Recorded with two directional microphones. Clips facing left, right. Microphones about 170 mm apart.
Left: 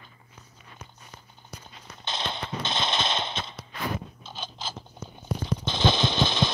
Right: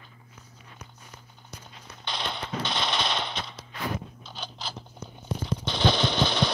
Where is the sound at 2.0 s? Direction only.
25° left (ahead or behind).